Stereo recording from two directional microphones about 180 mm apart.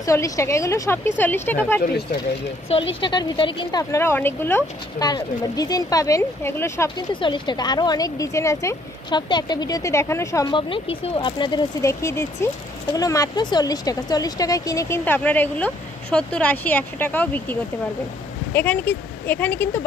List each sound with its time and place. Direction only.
0.0 s speech: 15° left (ahead or behind)
2.9 s speech: 25° left (ahead or behind)
3.9 s speech: 15° left (ahead or behind)
7.2 s speech: 25° left (ahead or behind)